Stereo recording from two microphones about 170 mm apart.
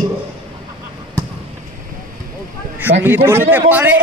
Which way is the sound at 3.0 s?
15° right (ahead or behind).